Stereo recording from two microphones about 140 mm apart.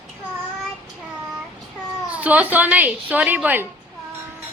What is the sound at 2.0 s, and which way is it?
A woman's voice, 10° right (ahead or behind).